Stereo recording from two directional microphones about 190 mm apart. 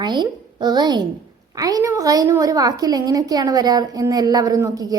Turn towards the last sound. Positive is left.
turn(degrees=-20)  # may be behind; listen again after turning